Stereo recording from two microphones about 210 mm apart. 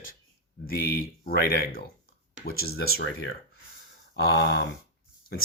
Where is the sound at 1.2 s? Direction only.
45° left (ahead or behind).